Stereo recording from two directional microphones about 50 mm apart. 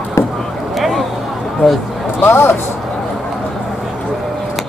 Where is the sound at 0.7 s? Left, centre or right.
Centre.